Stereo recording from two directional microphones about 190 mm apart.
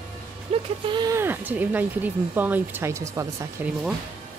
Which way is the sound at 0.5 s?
30° right (ahead or behind).